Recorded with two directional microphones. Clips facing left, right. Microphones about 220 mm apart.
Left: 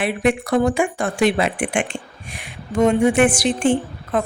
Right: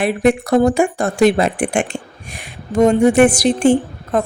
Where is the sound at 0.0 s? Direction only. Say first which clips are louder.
Right 4 dB; 40° right (ahead or behind).